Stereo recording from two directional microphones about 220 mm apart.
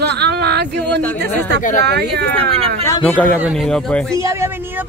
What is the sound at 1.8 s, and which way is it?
Speech, 50° right (ahead or behind).